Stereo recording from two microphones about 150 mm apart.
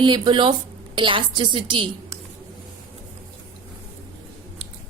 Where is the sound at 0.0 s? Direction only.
30° right (ahead or behind).